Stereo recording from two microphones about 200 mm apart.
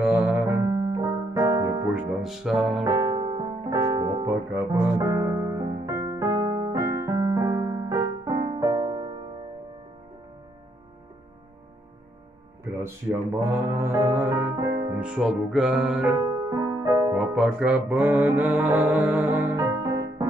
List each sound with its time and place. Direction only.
0.0 s music: 5° right (ahead or behind)
2.0 s speech: centre (ahead or behind)
2.8 s piano: 20° right (ahead or behind)
12.7 s music: 10° right (ahead or behind)
15.0 s music: 5° right (ahead or behind)
16.2 s music: 15° right (ahead or behind)
17.2 s music: 5° right (ahead or behind)